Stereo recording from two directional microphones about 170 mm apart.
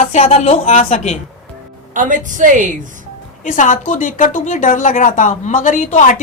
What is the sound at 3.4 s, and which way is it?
A woman's voice, 50° left (ahead or behind).